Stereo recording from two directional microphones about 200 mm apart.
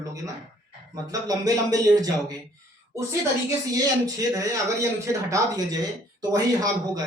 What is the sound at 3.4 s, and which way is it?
Speech, 20° right (ahead or behind).